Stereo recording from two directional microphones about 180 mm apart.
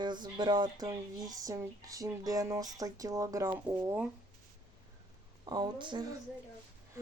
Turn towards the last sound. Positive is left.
turn(degrees=-25)  # may be behind; listen again after turning